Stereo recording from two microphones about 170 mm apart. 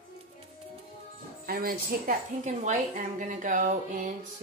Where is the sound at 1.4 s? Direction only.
55° right (ahead or behind).